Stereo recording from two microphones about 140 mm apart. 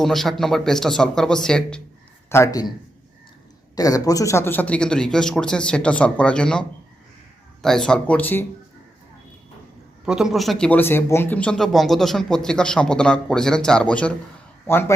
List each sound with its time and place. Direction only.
0.0 s speech: centre (ahead or behind)
2.3 s a man's voice: 20° left (ahead or behind)
3.8 s a man's voice: 25° left (ahead or behind)
10.1 s speech: 5° right (ahead or behind)
10.7 s a man's voice: 15° left (ahead or behind)